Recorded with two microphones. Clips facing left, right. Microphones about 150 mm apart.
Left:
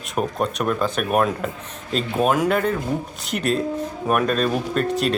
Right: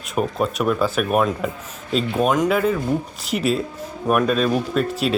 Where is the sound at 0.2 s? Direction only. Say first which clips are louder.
Right 2 dB; centre (ahead or behind).